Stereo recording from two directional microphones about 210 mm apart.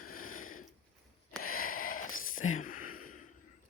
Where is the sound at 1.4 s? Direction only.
90° left.